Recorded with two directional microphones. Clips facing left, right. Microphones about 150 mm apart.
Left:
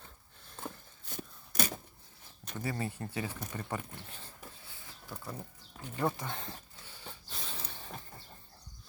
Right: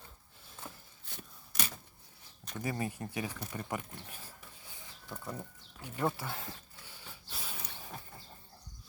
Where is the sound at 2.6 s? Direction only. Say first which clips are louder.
Even; 15° right (ahead or behind).